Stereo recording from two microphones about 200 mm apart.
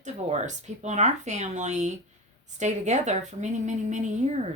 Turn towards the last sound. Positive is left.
turn(degrees=-35)  # may be behind; listen again after turning